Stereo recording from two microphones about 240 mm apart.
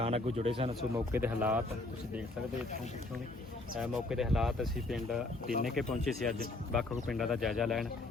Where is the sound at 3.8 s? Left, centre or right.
Centre.